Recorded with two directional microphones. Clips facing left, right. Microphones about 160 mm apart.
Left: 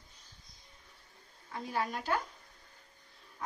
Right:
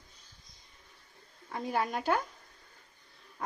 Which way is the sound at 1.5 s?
55° right (ahead or behind).